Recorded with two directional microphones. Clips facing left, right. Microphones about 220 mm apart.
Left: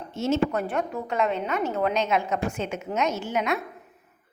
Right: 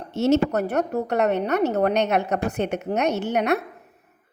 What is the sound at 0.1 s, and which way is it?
Speech, 65° right (ahead or behind).